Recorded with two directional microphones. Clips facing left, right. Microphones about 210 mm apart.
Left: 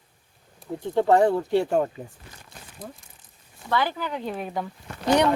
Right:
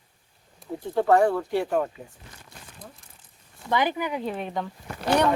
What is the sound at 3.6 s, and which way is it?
Speech, 15° right (ahead or behind).